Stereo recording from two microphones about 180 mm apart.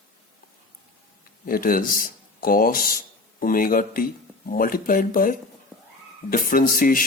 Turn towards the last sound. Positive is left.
turn(degrees=50)  # may be behind; listen again after turning